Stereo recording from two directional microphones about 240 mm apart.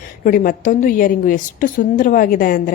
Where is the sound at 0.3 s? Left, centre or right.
Left.